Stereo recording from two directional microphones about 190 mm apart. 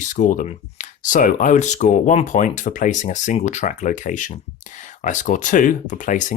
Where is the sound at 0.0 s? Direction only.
40° left (ahead or behind).